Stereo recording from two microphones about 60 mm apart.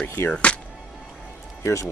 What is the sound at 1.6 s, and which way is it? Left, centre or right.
Speech, left.